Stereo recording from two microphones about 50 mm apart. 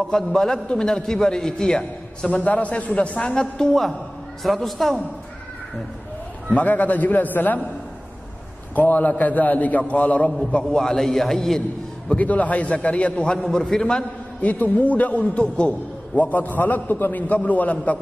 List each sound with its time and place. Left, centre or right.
0.1 s a man's voice: centre
2.3 s a man's voice: left; by 5.0 s centre
6.5 s a man's voice: left
8.7 s a man's voice: left
10.7 s a man's voice: centre
12.2 s a man's voice: left
13.4 s a man's voice: centre
14.4 s a man's voice: left
16.2 s a man's voice: left